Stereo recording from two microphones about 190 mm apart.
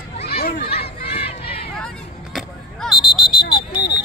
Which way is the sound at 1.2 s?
30° left (ahead or behind).